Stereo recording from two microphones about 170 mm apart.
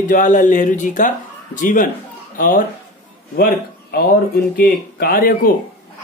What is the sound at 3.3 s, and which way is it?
Speech, 65° left (ahead or behind).